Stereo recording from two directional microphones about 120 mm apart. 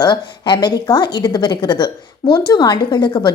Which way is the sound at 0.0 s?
35° left (ahead or behind).